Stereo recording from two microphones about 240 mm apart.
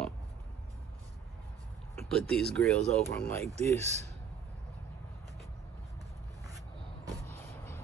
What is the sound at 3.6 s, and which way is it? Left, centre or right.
Speech, right.